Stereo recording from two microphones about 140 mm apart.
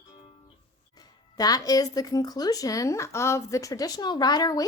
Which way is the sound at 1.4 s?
25° left (ahead or behind).